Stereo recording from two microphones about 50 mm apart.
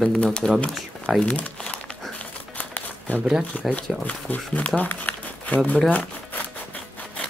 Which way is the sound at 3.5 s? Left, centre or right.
Left.